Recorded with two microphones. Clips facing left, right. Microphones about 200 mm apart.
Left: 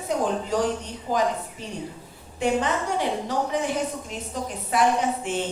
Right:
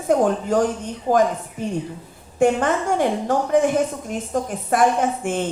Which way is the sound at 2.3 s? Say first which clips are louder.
Right 6 dB; 50° right (ahead or behind).